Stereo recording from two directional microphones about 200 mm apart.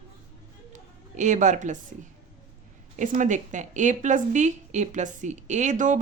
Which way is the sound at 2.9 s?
40° right (ahead or behind).